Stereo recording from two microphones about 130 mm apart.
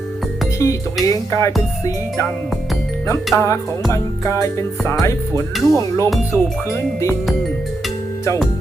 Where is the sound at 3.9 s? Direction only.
25° left (ahead or behind).